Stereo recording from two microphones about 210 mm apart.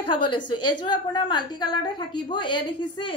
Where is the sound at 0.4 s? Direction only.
90° left.